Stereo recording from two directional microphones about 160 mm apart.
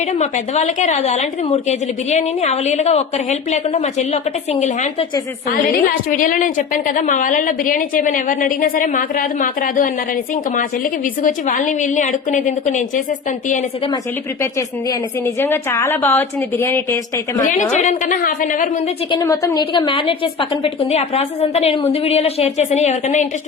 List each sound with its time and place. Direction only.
0.2 s a woman's voice: 50° left (ahead or behind)
6.1 s a woman's voice: 55° left (ahead or behind)
11.2 s a woman's voice: 55° left (ahead or behind)
15.4 s a woman's voice: 15° left (ahead or behind)
17.5 s a woman's voice: 50° left (ahead or behind)
19.1 s a woman's voice: 20° left (ahead or behind); by 23.2 s 45° left (ahead or behind)